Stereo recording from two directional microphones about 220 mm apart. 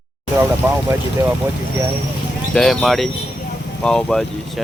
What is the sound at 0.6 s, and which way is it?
Speech, 10° right (ahead or behind).